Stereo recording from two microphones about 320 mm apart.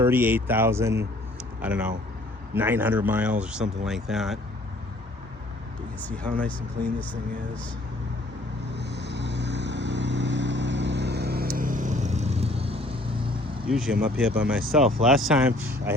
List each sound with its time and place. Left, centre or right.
0.0 s speech: centre
6.2 s speech: right
8.7 s vehicle: right
13.7 s speech: centre